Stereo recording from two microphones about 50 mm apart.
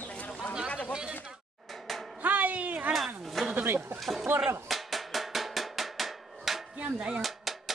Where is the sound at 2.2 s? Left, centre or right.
Right.